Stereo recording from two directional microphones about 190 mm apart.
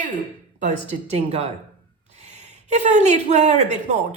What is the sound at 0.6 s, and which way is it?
Speech, 35° right (ahead or behind).